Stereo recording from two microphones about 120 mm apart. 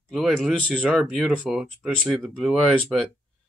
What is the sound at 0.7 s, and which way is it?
Speech, 10° right (ahead or behind).